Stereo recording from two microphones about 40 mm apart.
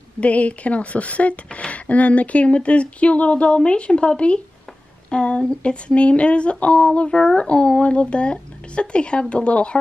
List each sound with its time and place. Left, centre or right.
0.2 s speech: left